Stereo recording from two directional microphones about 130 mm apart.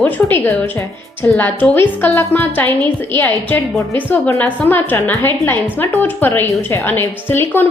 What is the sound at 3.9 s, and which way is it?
A woman's voice, 15° left (ahead or behind).